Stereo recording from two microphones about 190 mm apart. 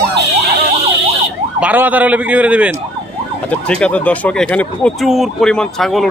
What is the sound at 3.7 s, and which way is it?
Speech, 5° left (ahead or behind).